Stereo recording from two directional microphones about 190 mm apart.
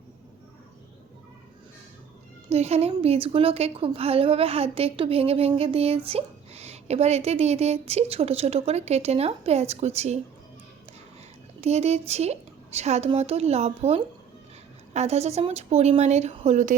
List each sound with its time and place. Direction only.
2.5 s a woman's voice: 35° right (ahead or behind)
11.6 s a woman's voice: 35° right (ahead or behind)